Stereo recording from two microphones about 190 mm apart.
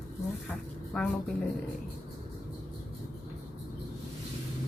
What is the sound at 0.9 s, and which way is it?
Speech, 5° left (ahead or behind).